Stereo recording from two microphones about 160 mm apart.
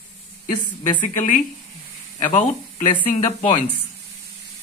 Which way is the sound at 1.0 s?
50° left (ahead or behind).